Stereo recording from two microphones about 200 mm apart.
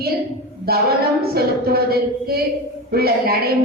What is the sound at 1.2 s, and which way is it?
A woman's voice, 50° right (ahead or behind).